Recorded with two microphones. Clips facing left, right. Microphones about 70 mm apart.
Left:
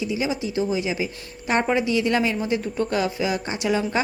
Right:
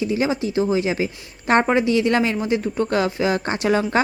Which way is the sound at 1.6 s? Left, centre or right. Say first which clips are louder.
Right 3 dB; right.